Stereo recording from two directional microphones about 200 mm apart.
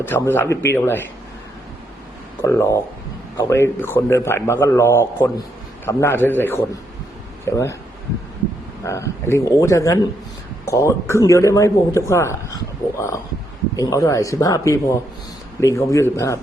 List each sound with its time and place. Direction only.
0.0 s speech: 10° left (ahead or behind)
2.4 s speech: 15° left (ahead or behind)
8.8 s speech: 15° left (ahead or behind)